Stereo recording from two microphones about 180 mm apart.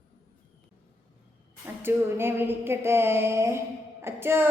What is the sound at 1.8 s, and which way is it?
A woman's voice, 15° right (ahead or behind).